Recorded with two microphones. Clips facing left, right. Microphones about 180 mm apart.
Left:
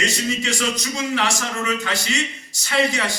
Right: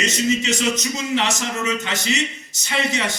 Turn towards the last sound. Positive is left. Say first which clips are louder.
# left 2 dB
turn(degrees=-20)  # may be behind; listen again after turning